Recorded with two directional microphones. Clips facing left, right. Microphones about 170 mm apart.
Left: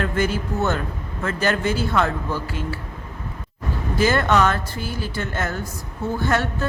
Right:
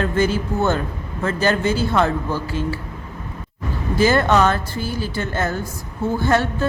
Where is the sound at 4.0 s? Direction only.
30° right (ahead or behind).